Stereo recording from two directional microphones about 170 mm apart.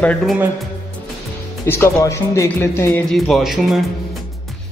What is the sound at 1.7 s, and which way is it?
Speech, 15° left (ahead or behind).